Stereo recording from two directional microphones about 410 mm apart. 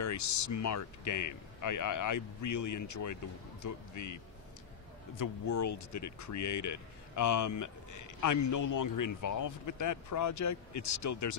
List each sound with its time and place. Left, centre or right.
0.0 s speech: left